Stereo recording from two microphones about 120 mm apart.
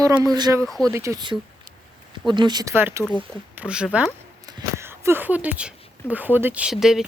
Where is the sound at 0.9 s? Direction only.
25° right (ahead or behind).